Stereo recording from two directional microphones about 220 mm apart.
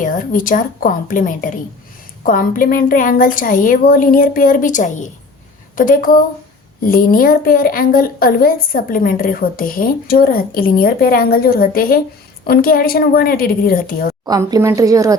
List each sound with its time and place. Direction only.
0.0 s a woman's voice: 40° left (ahead or behind)
14.3 s speech: 15° right (ahead or behind)